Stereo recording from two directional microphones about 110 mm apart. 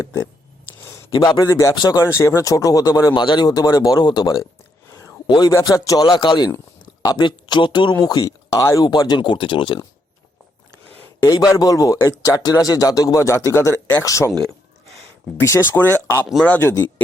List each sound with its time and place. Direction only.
1.1 s speech: 45° left (ahead or behind)
1.5 s speech: 25° left (ahead or behind)
1.7 s speech: 40° left (ahead or behind)
2.0 s speech: 25° left (ahead or behind)
3.1 s speech: 45° left (ahead or behind)
5.3 s speech: 40° left (ahead or behind)
6.1 s speech: 45° left (ahead or behind)
11.5 s speech: 30° left (ahead or behind)
15.4 s speech: 25° left (ahead or behind)